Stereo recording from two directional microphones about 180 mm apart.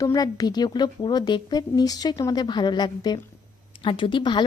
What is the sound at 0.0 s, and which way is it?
A woman's voice, 20° left (ahead or behind).